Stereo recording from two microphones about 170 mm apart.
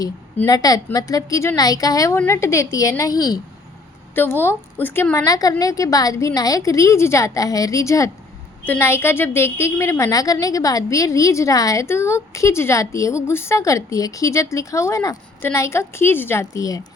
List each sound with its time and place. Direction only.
0.3 s a woman's voice: 20° left (ahead or behind)